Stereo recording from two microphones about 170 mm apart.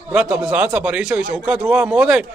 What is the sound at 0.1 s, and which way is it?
A man's voice, 5° right (ahead or behind).